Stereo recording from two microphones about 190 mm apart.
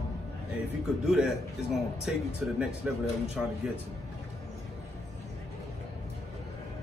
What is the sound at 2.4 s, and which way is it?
Speech, 5° right (ahead or behind).